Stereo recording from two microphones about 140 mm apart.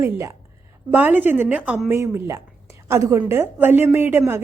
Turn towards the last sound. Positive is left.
turn(degrees=-15)  # may be behind; listen again after turning